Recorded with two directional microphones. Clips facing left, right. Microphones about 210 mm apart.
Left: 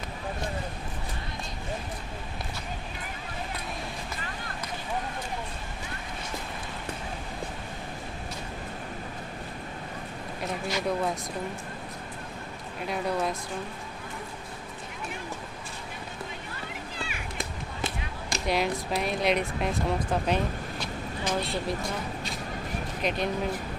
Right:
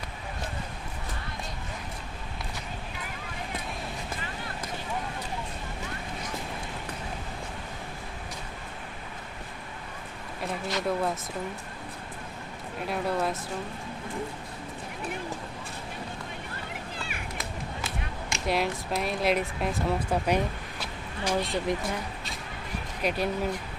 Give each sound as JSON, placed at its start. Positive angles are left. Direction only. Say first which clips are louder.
{"t": 10.7, "sound": "speech", "louder": "even", "side_deg": 0}
{"t": 12.9, "sound": "speech", "louder": "even", "side_deg": -5}
{"t": 17.8, "sound": "a sound", "louder": "left 1 dB", "side_deg": 35}
{"t": 18.4, "sound": "speech", "louder": "left 1 dB", "side_deg": 0}
{"t": 20.8, "sound": "a sound", "louder": "right 1 dB", "side_deg": -15}
{"t": 23.0, "sound": "speech", "louder": "right 1 dB", "side_deg": -5}